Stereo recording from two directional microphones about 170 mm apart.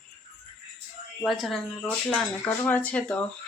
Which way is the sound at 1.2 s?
Centre (ahead or behind).